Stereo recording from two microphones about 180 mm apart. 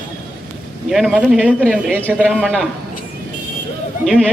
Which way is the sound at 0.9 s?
Centre (ahead or behind).